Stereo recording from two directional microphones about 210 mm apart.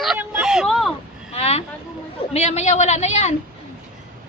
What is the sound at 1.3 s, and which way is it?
A woman's voice, 30° left (ahead or behind).